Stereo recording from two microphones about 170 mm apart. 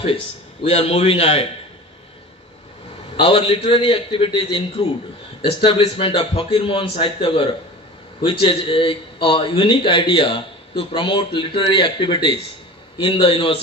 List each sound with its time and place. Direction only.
0.0 s a man's voice: 35° left (ahead or behind)
3.2 s a man's voice: 30° left (ahead or behind)